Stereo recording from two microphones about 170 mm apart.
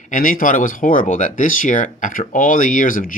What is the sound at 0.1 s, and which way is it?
Speech, 55° left (ahead or behind).